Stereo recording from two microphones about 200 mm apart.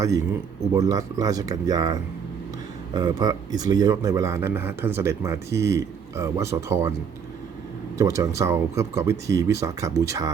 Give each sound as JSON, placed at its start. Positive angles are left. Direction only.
{"t": 0.3, "sound": "speech", "side_deg": -15}
{"t": 7.9, "sound": "speech", "side_deg": -15}